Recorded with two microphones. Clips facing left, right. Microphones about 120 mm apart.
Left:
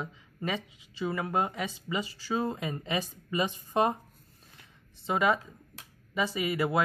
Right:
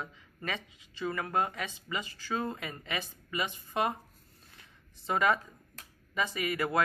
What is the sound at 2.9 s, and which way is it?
A woman's voice, 35° left (ahead or behind).